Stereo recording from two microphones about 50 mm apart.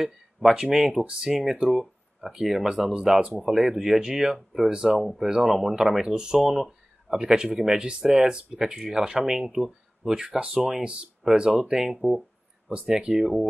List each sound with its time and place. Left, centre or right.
0.0 s speech: centre
0.9 s speech: right
3.4 s speech: centre
4.9 s speech: centre
6.5 s a sound: centre
7.2 s speech: centre
11.5 s speech: centre